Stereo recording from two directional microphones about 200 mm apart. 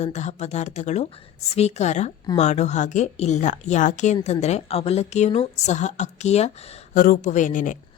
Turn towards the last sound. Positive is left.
turn(degrees=40)  # may be behind; listen again after turning